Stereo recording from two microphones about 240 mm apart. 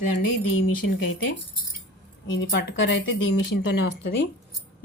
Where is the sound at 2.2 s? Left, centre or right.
Left.